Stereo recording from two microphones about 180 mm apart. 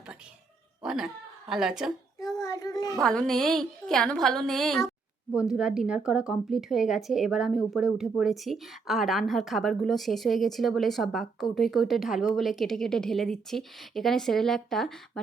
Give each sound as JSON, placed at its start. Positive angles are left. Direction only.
{"t": 0.8, "sound": "speech", "side_deg": -5}
{"t": 2.4, "sound": "a child's voice", "side_deg": 20}
{"t": 3.0, "sound": "speech", "side_deg": 5}